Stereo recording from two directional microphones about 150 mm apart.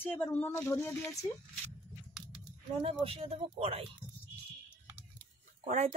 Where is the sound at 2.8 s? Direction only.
40° right (ahead or behind).